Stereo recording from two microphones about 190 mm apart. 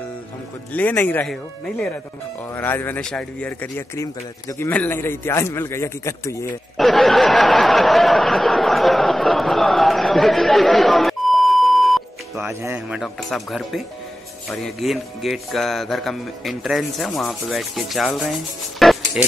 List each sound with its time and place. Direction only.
0.7 s a man's voice: 10° left (ahead or behind)
6.8 s a sound: centre (ahead or behind)
12.4 s speech: 10° right (ahead or behind)